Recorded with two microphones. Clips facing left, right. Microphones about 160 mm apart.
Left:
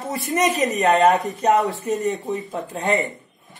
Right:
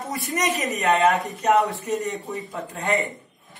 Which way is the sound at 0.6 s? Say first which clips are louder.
Left 3 dB; 40° left (ahead or behind).